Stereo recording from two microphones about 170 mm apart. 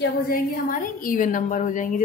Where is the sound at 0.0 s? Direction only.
55° left (ahead or behind).